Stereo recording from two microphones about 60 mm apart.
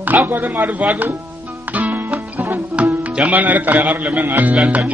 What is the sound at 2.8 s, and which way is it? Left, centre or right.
Speech, right.